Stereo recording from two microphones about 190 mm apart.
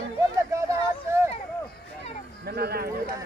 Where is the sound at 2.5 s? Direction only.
55° right (ahead or behind).